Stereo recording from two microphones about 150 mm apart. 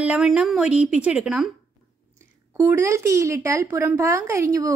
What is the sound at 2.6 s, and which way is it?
A woman's voice, 15° right (ahead or behind).